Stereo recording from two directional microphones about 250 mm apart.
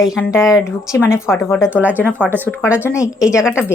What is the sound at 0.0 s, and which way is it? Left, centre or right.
Speech, centre.